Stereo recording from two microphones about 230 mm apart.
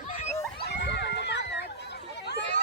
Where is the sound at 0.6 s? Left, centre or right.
Left.